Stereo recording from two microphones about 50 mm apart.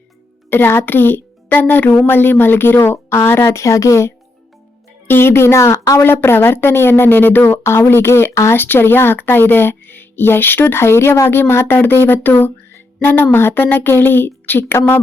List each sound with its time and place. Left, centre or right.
0.5 s a woman's voice: left
3.5 s speech: left
5.0 s a woman's voice: left
6.0 s speech: left
7.4 s speech: left